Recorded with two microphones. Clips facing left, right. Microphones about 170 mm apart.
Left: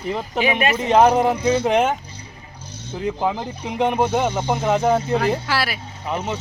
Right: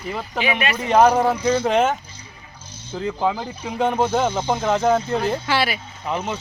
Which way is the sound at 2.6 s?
65° left (ahead or behind).